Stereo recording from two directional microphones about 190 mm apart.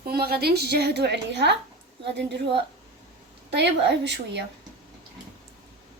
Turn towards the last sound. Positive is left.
turn(degrees=-65)  # may be behind; listen again after turning